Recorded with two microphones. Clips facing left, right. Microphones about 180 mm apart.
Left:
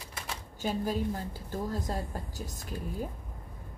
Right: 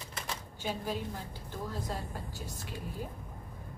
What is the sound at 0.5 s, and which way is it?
A woman's voice, 40° left (ahead or behind).